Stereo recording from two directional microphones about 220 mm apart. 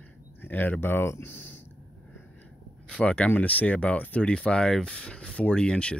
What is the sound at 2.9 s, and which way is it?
Speech, 5° left (ahead or behind).